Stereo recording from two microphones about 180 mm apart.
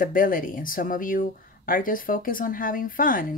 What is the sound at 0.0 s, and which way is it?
Speech, 50° left (ahead or behind).